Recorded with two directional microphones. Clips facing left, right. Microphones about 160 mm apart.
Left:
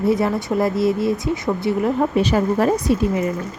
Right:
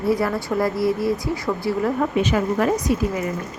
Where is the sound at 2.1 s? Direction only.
35° left (ahead or behind).